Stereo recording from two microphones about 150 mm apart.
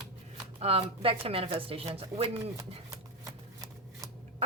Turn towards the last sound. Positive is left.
turn(degrees=-25)  # may be behind; listen again after turning